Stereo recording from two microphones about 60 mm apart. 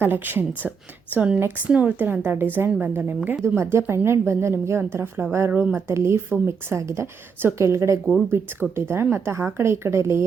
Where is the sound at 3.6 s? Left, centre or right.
Right.